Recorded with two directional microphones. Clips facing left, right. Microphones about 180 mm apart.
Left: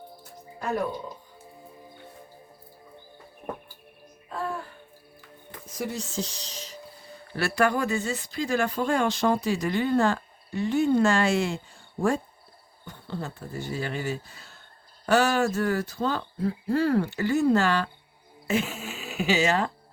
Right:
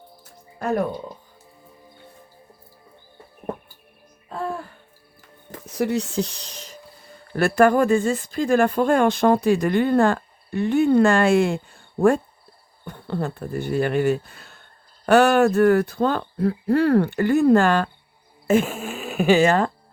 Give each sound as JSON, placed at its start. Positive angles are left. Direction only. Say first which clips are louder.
{"t": 5.6, "sound": "speech", "louder": "right 10 dB", "side_deg": -65}